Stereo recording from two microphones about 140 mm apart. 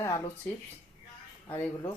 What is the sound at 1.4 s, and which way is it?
Speech, 20° left (ahead or behind).